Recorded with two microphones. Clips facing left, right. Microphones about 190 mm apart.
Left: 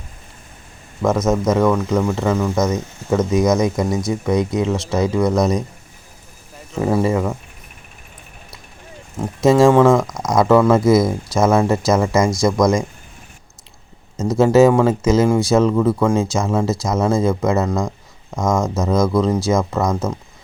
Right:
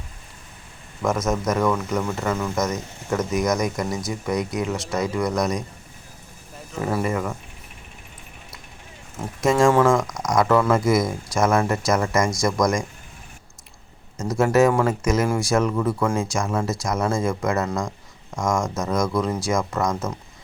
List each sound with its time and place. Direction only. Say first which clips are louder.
1.3 s speech: left 6 dB; 25° left (ahead or behind)
6.7 s speech: left 6 dB; 25° left (ahead or behind)
9.1 s speech: left 6 dB; 25° left (ahead or behind)
14.3 s speech: left 6 dB; 25° left (ahead or behind)
17.7 s speech: left 5 dB; 5° left (ahead or behind)
18.8 s speech: left 6 dB; 25° left (ahead or behind)